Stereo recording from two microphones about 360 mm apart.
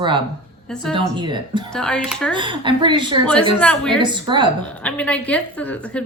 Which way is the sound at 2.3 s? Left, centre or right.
Centre.